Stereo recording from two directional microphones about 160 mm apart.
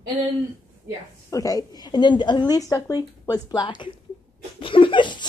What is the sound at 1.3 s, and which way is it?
A woman's voice, 20° left (ahead or behind).